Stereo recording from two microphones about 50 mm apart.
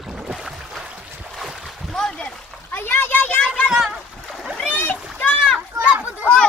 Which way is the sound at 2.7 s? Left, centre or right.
Left.